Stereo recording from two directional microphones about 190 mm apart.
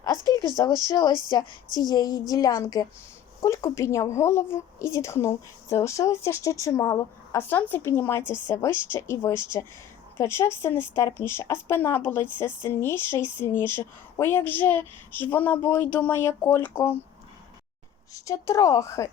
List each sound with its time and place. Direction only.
0.5 s a woman's voice: 20° left (ahead or behind)
18.1 s a woman's voice: 15° left (ahead or behind)